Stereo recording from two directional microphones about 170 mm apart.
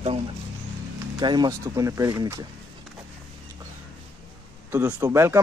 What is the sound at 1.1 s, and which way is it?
A man's voice, 25° right (ahead or behind).